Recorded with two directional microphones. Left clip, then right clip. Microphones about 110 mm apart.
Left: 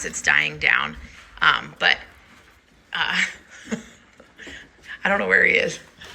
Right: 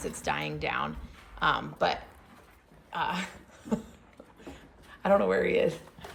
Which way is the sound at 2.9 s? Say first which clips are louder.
Left 10 dB; 30° right (ahead or behind).